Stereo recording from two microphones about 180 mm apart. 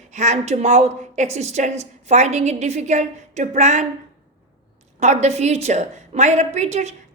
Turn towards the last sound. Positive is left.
turn(degrees=-40)  # may be behind; listen again after turning